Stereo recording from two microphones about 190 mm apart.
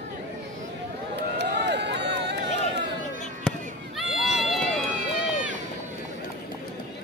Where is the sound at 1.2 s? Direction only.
65° right (ahead or behind).